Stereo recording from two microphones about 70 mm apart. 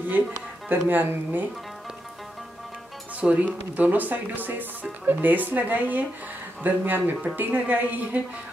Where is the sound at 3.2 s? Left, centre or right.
Centre.